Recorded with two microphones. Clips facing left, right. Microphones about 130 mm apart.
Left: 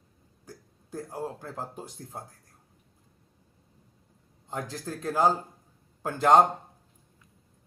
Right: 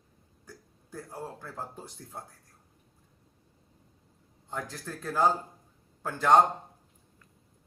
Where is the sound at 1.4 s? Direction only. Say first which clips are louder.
Left 3 dB; 15° left (ahead or behind).